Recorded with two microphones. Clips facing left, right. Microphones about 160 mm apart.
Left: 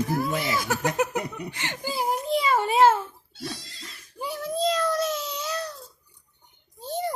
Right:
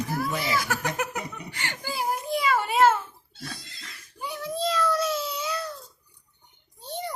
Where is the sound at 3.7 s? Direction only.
35° left (ahead or behind).